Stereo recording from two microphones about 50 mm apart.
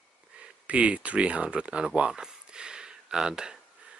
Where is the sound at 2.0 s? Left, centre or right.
Centre.